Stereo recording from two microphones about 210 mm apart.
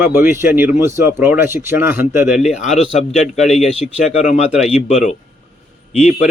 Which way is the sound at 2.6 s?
30° left (ahead or behind).